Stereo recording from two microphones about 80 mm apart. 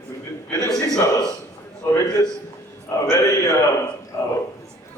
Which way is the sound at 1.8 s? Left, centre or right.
Left.